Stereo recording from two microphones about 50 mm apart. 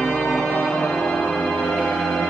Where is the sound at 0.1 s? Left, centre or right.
Centre.